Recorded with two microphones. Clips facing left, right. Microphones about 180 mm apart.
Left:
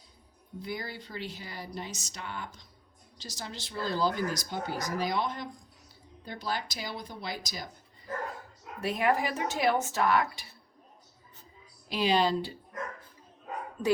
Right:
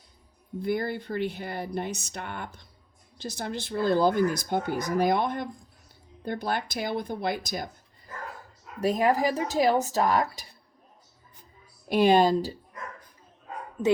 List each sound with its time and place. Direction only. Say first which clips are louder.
0.6 s speech: right 10 dB; 55° right (ahead or behind)
8.8 s speech: right 5 dB; 40° right (ahead or behind)
11.9 s speech: right 7 dB; 55° right (ahead or behind)
13.8 s speech: right 4 dB; 15° right (ahead or behind)